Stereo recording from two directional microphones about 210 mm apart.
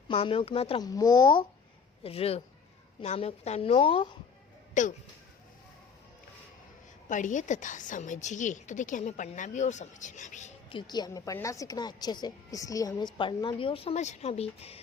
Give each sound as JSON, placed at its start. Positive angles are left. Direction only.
{"t": 0.1, "sound": "a woman's voice", "side_deg": 25}
{"t": 4.7, "sound": "speech", "side_deg": 35}
{"t": 7.1, "sound": "a woman's voice", "side_deg": 35}
{"t": 10.7, "sound": "a woman's voice", "side_deg": 20}